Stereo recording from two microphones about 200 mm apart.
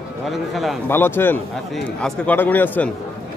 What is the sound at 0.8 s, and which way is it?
Speech, 10° left (ahead or behind).